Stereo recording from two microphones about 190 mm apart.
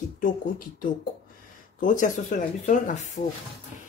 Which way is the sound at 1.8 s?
45° left (ahead or behind).